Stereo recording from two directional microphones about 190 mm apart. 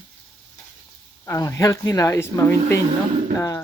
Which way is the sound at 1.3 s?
15° left (ahead or behind).